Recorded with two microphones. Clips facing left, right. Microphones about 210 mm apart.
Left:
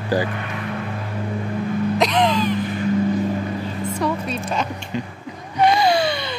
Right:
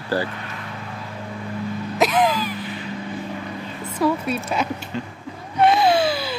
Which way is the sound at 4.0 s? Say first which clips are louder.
Right 5 dB; 5° right (ahead or behind).